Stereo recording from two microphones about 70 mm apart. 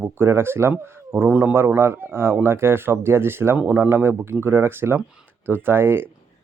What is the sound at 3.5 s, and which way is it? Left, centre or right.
A man's voice, right.